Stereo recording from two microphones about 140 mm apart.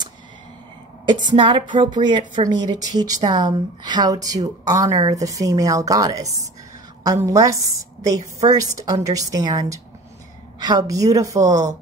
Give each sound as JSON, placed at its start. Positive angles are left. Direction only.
{"t": 1.0, "sound": "a woman's voice", "side_deg": -30}